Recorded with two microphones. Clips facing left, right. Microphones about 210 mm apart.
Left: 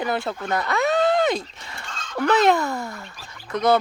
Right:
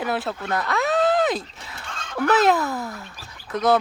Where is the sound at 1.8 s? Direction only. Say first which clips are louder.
Right 3 dB; 55° right (ahead or behind).